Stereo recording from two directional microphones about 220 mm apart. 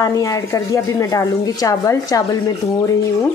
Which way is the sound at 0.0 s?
15° left (ahead or behind).